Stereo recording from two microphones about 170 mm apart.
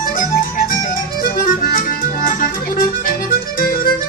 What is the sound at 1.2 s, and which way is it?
Music, 55° left (ahead or behind).